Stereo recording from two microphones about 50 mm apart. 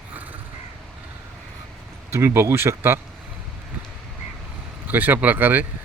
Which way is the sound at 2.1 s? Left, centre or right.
Right.